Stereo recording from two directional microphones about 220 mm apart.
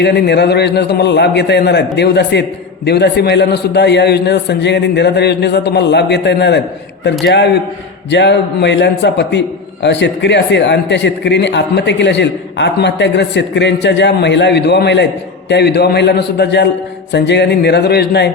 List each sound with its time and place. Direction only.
0.0 s a man's voice: 50° left (ahead or behind)